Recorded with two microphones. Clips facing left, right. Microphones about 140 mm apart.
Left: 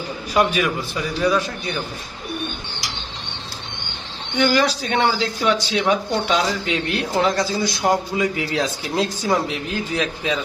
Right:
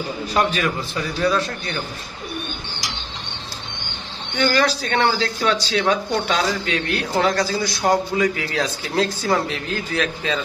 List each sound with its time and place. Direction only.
0.3 s a man's voice: 10° left (ahead or behind)
4.4 s speech: 15° left (ahead or behind)